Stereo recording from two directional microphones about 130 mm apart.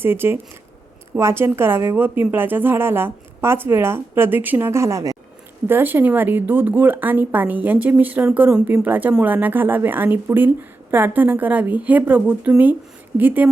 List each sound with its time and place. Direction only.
0.0 s a woman's voice: 15° right (ahead or behind)